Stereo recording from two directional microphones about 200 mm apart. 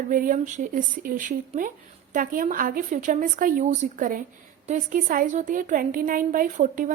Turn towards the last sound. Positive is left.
turn(degrees=-40)  # may be behind; listen again after turning